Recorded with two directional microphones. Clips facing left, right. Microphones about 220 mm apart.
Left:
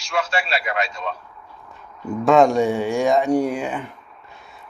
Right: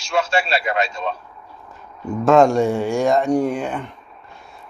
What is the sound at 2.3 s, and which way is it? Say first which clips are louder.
Speech: right 1 dB; centre (ahead or behind).